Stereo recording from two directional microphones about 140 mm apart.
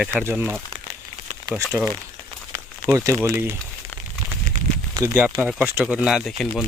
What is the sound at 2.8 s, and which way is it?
Speech, 15° right (ahead or behind).